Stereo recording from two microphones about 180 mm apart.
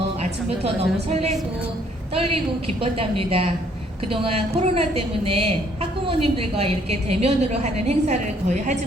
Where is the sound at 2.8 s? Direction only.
30° right (ahead or behind).